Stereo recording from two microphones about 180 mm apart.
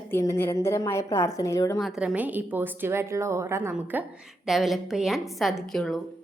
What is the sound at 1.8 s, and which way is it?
A woman's voice, centre (ahead or behind).